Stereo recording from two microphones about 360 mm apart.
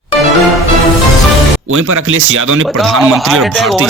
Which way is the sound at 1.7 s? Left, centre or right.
Right.